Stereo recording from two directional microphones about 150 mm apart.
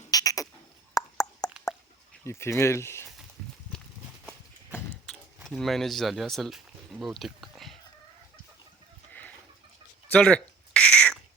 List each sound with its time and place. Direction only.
0.1 s frog: 25° left (ahead or behind)
0.9 s plop: 25° left (ahead or behind)
2.2 s speech: 15° left (ahead or behind)
4.3 s a sound: 5° left (ahead or behind)
10.2 s owl: 5° left (ahead or behind)